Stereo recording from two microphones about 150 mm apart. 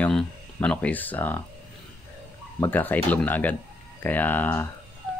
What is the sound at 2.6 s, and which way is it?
Speech, 10° left (ahead or behind).